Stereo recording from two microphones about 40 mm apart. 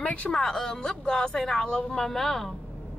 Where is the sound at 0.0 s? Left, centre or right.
Left.